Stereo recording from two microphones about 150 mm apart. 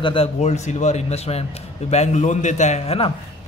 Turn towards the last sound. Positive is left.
turn(degrees=45)  # may be behind; listen again after turning